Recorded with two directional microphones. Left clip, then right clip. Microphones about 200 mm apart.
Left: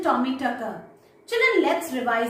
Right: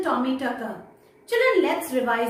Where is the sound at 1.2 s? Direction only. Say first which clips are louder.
Even; 5° right (ahead or behind).